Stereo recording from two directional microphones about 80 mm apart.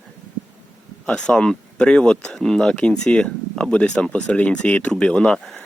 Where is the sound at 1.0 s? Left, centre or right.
Centre.